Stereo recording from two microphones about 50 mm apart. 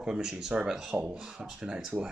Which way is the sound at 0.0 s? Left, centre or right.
Centre.